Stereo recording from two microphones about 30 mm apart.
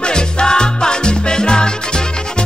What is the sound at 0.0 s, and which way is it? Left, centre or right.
Music, left.